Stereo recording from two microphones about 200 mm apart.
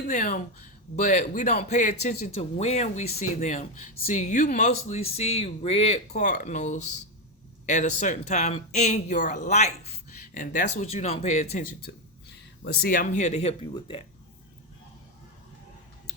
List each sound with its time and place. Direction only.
0.1 s a man's voice: 35° left (ahead or behind)
11.9 s speech: 60° left (ahead or behind)
12.6 s a man's voice: 50° left (ahead or behind); by 14.0 s 30° left (ahead or behind)